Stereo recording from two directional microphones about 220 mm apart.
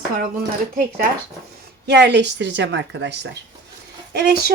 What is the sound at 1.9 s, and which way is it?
Speech, 50° right (ahead or behind).